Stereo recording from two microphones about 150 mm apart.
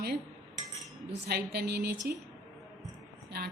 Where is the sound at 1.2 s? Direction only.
90° right.